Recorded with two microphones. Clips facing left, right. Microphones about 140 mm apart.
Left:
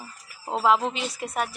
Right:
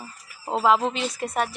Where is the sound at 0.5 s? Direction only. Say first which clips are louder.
Right 1 dB; centre (ahead or behind).